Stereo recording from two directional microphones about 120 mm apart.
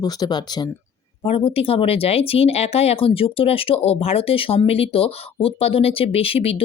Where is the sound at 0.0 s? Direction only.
35° left (ahead or behind).